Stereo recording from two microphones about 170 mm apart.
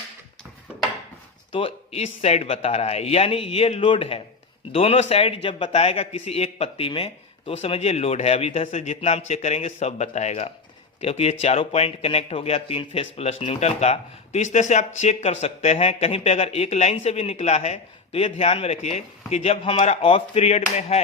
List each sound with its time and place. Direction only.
1.5 s a man's voice: 35° left (ahead or behind)